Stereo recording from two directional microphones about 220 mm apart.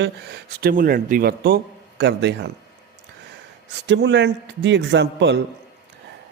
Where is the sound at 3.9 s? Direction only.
50° right (ahead or behind).